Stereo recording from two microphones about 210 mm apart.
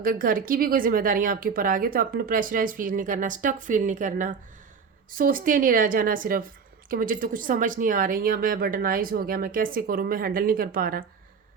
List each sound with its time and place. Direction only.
0.0 s a woman's voice: 40° right (ahead or behind)